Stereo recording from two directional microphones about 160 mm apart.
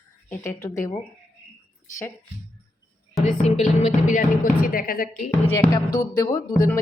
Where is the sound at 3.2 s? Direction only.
45° left (ahead or behind); by 5.0 s 60° left (ahead or behind).